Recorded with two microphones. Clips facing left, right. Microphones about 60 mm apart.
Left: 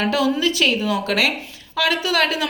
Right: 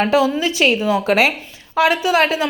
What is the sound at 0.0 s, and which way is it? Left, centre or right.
A woman's voice, right.